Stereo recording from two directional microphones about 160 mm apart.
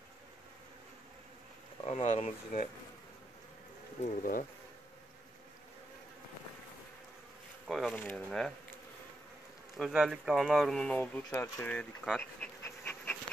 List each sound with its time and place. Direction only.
1.9 s speech: 45° left (ahead or behind)
4.0 s bee: 55° left (ahead or behind)
7.6 s speech: centre (ahead or behind)
9.8 s speech: centre (ahead or behind)
11.2 s speech: 20° left (ahead or behind)
11.7 s dog: 5° left (ahead or behind)